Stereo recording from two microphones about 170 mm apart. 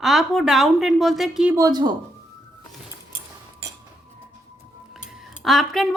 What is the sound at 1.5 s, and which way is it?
Speech, 20° right (ahead or behind).